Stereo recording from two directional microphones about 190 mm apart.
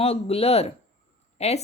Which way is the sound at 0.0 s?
30° left (ahead or behind).